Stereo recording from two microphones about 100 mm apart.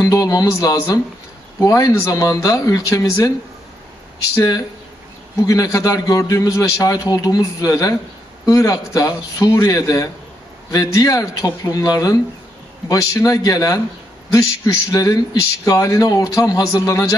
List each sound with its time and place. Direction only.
0.0 s a man's voice: 35° left (ahead or behind)
4.4 s a man's voice: 35° left (ahead or behind)